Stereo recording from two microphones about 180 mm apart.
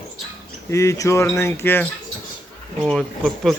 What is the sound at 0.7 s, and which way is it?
Speech, 15° left (ahead or behind).